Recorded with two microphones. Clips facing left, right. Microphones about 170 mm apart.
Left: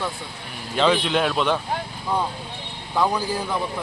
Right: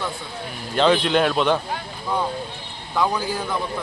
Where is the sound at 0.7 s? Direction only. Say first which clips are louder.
Right 2 dB; centre (ahead or behind).